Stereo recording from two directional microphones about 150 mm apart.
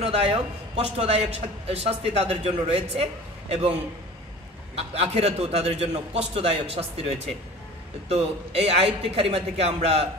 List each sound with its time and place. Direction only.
0.0 s a man's voice: 40° right (ahead or behind)
4.7 s a man's voice: 45° right (ahead or behind)